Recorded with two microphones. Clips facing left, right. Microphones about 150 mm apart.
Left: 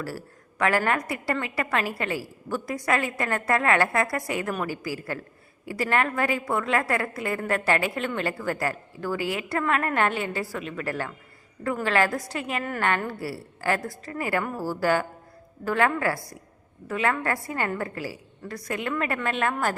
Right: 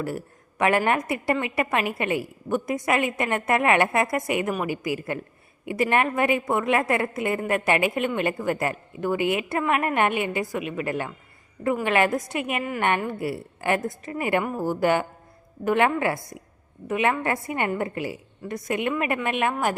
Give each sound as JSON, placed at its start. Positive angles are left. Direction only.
{"t": 0.6, "sound": "a woman's voice", "side_deg": -20}